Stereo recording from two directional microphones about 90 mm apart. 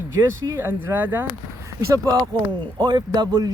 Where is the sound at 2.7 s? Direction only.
50° right (ahead or behind).